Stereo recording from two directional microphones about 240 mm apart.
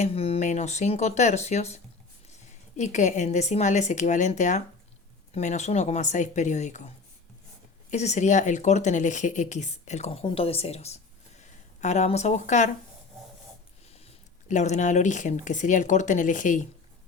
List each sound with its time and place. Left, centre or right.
0.0 s speech: left
14.0 s speech: left